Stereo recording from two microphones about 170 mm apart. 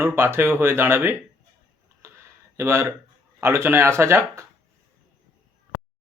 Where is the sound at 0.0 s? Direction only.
15° right (ahead or behind).